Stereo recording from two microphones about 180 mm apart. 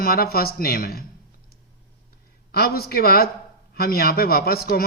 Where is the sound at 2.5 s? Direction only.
60° left (ahead or behind).